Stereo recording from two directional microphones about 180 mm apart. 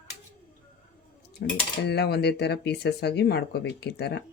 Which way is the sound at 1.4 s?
65° left (ahead or behind).